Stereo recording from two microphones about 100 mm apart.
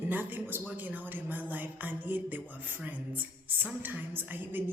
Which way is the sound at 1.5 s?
15° right (ahead or behind).